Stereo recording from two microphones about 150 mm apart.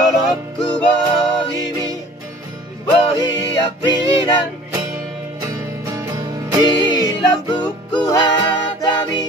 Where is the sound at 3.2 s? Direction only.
25° left (ahead or behind).